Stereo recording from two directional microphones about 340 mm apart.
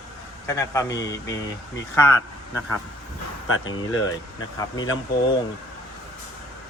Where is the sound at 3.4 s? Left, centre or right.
Left.